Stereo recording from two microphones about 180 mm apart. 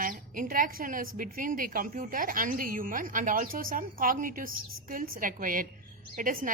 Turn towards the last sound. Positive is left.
turn(degrees=-50)  # may be behind; listen again after turning